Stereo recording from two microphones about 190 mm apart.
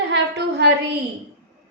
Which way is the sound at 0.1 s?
65° right (ahead or behind).